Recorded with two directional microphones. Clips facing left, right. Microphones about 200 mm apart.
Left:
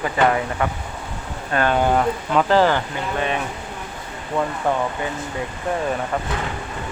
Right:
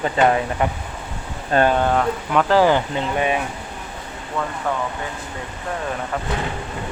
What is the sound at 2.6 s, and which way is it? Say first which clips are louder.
Speech: right 2 dB; 15° right (ahead or behind).